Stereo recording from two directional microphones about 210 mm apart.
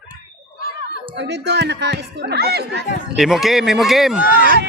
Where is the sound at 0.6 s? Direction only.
45° left (ahead or behind).